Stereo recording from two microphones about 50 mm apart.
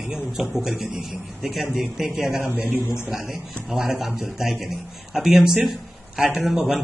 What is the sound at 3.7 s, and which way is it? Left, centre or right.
A man's voice, centre.